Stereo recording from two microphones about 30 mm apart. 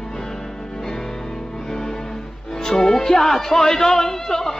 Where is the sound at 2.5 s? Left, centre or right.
Centre.